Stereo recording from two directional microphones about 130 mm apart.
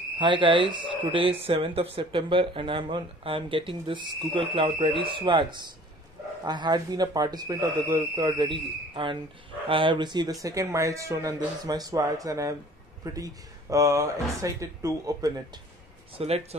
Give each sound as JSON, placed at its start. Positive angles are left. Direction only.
{"t": 0.2, "sound": "speech", "side_deg": -40}
{"t": 16.2, "sound": "speech", "side_deg": -50}